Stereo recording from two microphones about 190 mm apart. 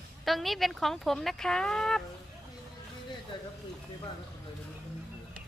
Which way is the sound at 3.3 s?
25° left (ahead or behind).